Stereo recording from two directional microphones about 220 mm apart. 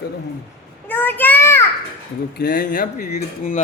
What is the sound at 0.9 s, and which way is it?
Child singing, 10° left (ahead or behind).